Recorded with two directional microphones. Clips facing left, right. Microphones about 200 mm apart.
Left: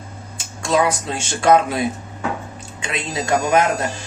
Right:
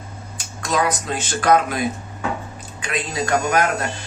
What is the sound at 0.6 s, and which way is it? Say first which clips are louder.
Speech: left 3 dB; 25° left (ahead or behind).